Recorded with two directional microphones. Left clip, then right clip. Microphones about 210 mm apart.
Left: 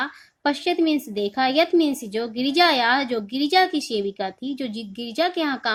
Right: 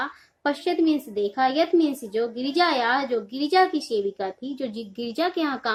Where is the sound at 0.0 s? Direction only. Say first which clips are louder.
Left 2 dB; 35° left (ahead or behind).